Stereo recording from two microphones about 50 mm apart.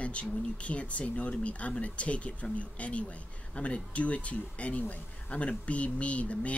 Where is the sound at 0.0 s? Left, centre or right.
Left.